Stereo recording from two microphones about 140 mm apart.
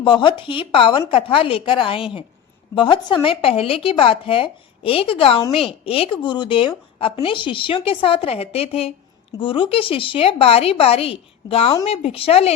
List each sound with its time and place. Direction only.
0.0 s speech: 35° left (ahead or behind)